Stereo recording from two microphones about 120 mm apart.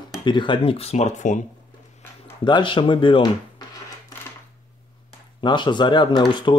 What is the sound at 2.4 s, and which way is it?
Speech, 40° left (ahead or behind).